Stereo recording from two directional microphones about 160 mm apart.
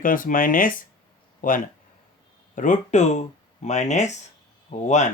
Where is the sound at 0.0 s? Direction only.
60° left (ahead or behind).